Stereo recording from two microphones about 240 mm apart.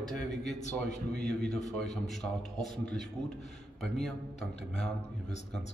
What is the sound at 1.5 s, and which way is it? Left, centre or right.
Speech, left.